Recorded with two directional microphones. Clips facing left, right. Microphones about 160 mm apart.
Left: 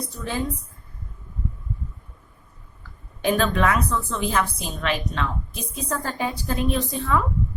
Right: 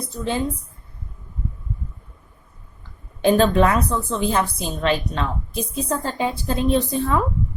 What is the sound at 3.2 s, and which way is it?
A woman's voice, 30° right (ahead or behind).